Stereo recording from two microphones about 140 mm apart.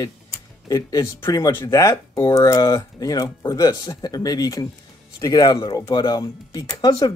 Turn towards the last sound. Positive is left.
turn(degrees=25)  # may be behind; listen again after turning